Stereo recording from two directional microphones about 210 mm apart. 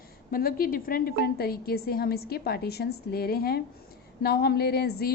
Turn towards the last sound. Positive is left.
turn(degrees=50)  # may be behind; listen again after turning